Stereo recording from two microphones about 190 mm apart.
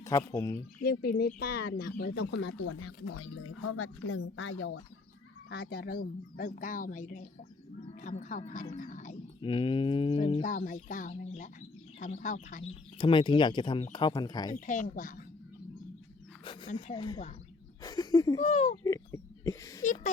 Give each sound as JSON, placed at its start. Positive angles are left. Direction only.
{"t": 0.0, "sound": "speech", "side_deg": 15}
{"t": 0.8, "sound": "speech", "side_deg": 55}
{"t": 5.5, "sound": "a woman's voice", "side_deg": 60}
{"t": 9.4, "sound": "a sound", "side_deg": 25}
{"t": 10.4, "sound": "a woman's voice", "side_deg": 45}
{"t": 13.0, "sound": "a sound", "side_deg": 25}
{"t": 14.5, "sound": "a woman's voice", "side_deg": 45}
{"t": 16.4, "sound": "a sound", "side_deg": 25}
{"t": 16.8, "sound": "speech", "side_deg": 25}
{"t": 18.4, "sound": "speech", "side_deg": 35}
{"t": 18.8, "sound": "speech", "side_deg": 15}